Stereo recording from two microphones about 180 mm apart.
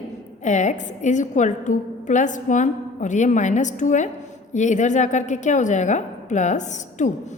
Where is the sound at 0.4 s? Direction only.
40° left (ahead or behind).